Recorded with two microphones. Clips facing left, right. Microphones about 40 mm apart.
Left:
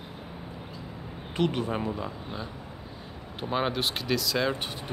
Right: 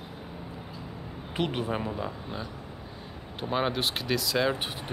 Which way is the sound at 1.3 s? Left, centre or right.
Centre.